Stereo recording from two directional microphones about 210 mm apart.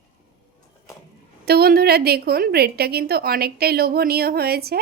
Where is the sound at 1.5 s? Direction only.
45° right (ahead or behind).